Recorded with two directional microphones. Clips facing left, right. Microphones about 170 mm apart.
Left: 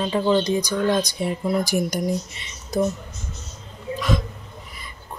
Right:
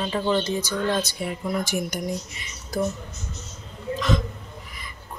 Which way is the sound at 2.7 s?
20° left (ahead or behind).